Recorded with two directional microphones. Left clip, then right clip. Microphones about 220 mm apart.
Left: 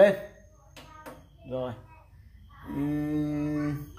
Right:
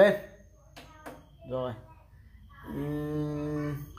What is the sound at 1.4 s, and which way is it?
Speech, 20° right (ahead or behind).